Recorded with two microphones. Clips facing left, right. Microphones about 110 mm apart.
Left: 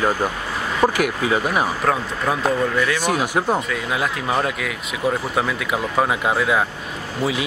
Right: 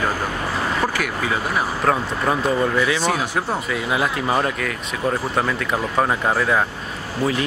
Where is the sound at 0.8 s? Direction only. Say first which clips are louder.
Left 9 dB; 15° left (ahead or behind).